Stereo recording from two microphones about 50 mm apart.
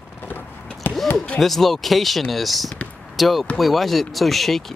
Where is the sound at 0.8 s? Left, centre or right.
Left.